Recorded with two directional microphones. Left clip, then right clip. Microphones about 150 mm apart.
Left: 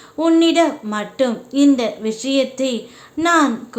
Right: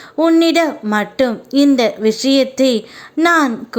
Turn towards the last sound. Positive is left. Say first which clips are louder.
# right 2 dB
turn(degrees=-40)  # may be behind; listen again after turning